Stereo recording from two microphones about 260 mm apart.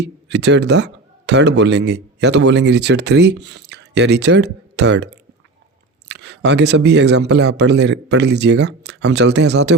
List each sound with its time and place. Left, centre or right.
0.0 s a man's voice: right
6.1 s a man's voice: right